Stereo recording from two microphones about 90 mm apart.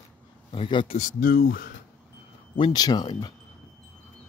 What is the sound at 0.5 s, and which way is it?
Speech, 65° left (ahead or behind).